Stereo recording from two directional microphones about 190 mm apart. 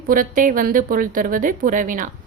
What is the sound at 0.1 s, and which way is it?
A woman's voice, 45° right (ahead or behind).